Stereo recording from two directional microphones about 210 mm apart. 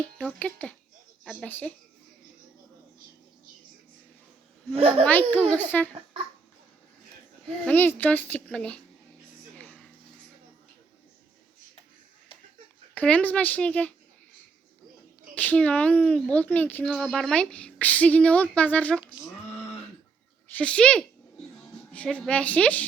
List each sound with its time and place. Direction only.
0.0 s a woman's voice: 5° left (ahead or behind)
4.7 s a child's voice: 30° right (ahead or behind)
5.0 s a woman's voice: 5° left (ahead or behind)
7.6 s a woman's voice: 10° left (ahead or behind)
9.6 s a sound: 5° left (ahead or behind)
12.9 s a woman's voice: 5° left (ahead or behind)
15.4 s a woman's voice: 5° left (ahead or behind)
19.5 s a sound: 5° left (ahead or behind)
20.6 s a woman's voice: 5° left (ahead or behind)